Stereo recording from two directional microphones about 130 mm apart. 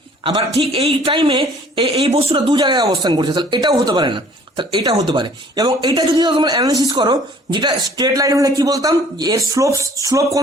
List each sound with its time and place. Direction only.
0.6 s speech: 50° right (ahead or behind); by 10.4 s 25° right (ahead or behind)